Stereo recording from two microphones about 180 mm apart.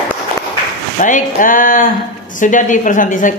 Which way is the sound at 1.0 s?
45° left (ahead or behind).